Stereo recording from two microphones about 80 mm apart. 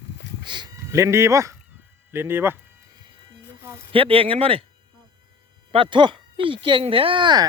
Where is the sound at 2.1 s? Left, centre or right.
Right.